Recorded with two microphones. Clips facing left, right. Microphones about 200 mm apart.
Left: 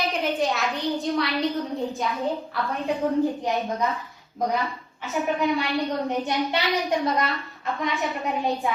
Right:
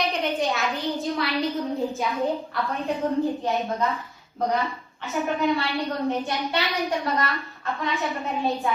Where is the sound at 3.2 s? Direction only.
15° left (ahead or behind).